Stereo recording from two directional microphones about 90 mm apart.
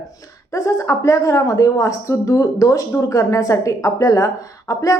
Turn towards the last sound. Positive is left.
turn(degrees=40)  # may be behind; listen again after turning